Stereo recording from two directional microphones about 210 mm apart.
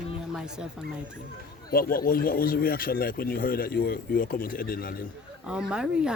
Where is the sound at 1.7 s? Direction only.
45° left (ahead or behind).